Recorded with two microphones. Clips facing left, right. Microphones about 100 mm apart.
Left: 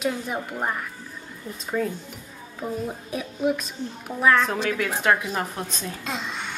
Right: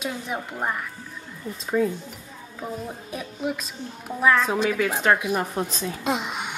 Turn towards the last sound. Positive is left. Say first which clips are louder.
# right 5 dB
turn(degrees=-15)  # may be behind; listen again after turning